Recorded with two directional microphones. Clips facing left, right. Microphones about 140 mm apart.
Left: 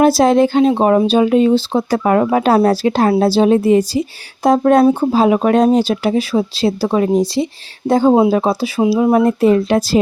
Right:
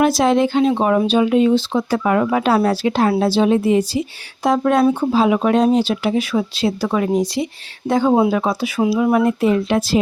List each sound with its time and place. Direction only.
0.0 s speech: 35° left (ahead or behind)